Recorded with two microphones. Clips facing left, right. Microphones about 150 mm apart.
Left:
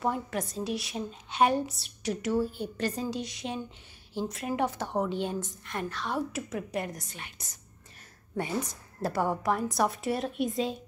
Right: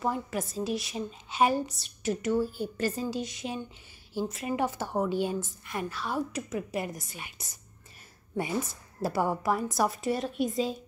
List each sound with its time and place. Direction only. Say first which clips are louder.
0.0 s a woman's voice: even; centre (ahead or behind)